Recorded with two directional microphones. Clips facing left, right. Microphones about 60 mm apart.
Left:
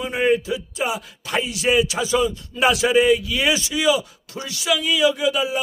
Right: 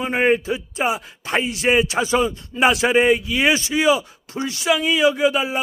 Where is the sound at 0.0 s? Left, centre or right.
Right.